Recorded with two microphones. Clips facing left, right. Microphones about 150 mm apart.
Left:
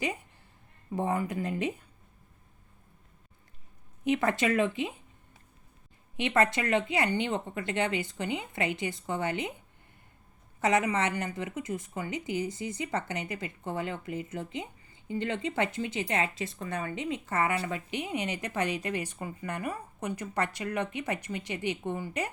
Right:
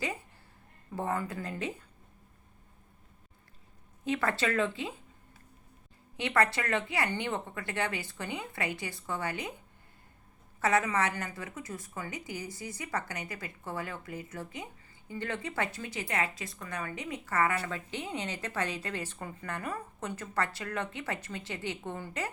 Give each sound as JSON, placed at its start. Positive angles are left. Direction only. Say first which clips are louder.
{"t": 0.9, "sound": "speech", "louder": "left 4 dB", "side_deg": 15}
{"t": 4.0, "sound": "speech", "louder": "left 4 dB", "side_deg": 20}
{"t": 6.1, "sound": "speech", "louder": "left 2 dB", "side_deg": 20}
{"t": 10.6, "sound": "speech", "louder": "left 2 dB", "side_deg": 20}